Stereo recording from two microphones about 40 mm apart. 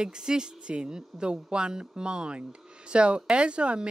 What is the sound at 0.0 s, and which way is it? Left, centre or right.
Speech, centre.